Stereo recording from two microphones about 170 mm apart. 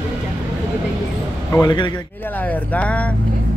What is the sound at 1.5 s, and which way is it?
Speech, 25° left (ahead or behind).